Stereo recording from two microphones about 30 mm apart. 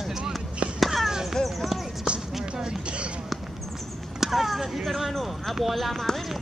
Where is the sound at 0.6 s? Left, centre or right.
Right.